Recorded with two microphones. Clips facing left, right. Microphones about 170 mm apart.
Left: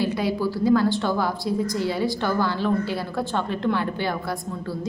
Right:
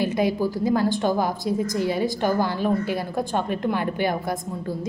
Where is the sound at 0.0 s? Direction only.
20° right (ahead or behind).